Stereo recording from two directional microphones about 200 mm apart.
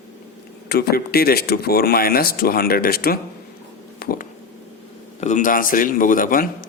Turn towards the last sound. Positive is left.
turn(degrees=45)  # may be behind; listen again after turning